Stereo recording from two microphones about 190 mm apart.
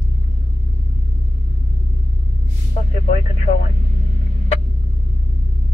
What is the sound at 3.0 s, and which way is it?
Radio, 40° left (ahead or behind).